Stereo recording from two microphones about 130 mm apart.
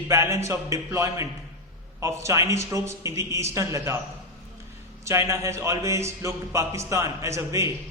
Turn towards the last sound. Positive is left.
turn(degrees=-25)  # may be behind; listen again after turning